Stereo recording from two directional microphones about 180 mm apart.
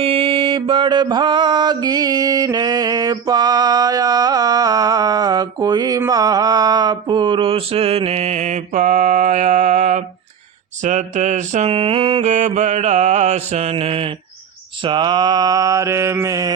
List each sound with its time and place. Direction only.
0.0 s mantra: 30° right (ahead or behind)